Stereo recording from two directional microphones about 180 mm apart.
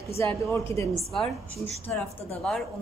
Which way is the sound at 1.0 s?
Centre (ahead or behind).